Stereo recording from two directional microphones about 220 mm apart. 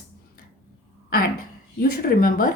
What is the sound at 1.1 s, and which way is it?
A woman's voice, 40° left (ahead or behind).